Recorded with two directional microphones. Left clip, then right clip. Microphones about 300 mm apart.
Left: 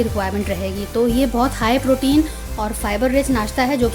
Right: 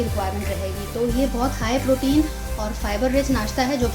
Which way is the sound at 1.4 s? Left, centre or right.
Left.